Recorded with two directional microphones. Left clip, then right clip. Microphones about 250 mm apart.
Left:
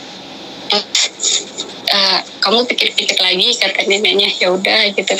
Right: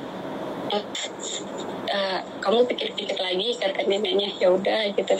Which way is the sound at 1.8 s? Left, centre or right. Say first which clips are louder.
Left 13 dB; left.